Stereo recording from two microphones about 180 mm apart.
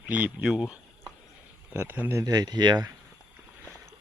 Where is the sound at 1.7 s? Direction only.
10° right (ahead or behind).